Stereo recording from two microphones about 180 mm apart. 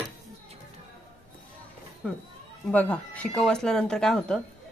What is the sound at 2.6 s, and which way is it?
Speech, 10° left (ahead or behind).